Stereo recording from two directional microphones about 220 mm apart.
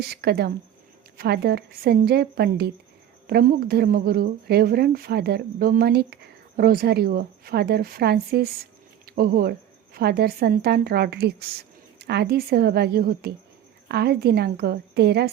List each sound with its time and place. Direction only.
0.1 s a woman's voice: 45° right (ahead or behind)